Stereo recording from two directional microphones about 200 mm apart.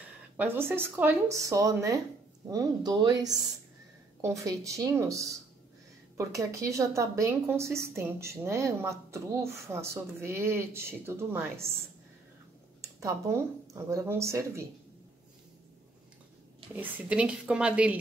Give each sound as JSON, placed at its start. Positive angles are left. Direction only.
{"t": 0.4, "sound": "a woman's voice", "side_deg": -10}
{"t": 12.8, "sound": "speech", "side_deg": -15}
{"t": 17.1, "sound": "a woman's voice", "side_deg": -5}